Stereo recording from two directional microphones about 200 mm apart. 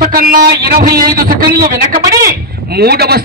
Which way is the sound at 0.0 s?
50° right (ahead or behind).